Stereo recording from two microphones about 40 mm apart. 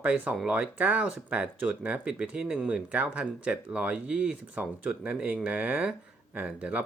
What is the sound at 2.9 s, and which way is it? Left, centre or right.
Speech, right.